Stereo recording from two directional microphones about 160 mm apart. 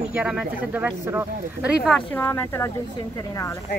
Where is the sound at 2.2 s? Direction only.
15° left (ahead or behind).